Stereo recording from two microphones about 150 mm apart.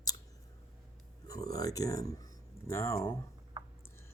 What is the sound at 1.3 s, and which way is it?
Speech, 25° left (ahead or behind).